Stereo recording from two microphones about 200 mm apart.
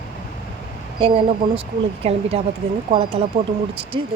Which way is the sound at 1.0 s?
30° right (ahead or behind).